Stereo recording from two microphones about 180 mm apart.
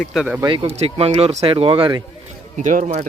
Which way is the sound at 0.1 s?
5° right (ahead or behind).